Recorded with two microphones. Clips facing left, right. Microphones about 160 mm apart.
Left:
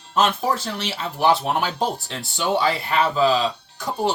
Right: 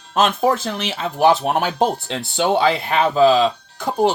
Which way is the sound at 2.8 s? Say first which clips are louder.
Right 5 dB; 50° right (ahead or behind).